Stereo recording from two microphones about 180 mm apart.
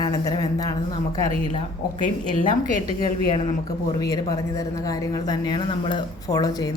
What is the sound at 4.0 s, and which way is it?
A woman's voice, 20° left (ahead or behind).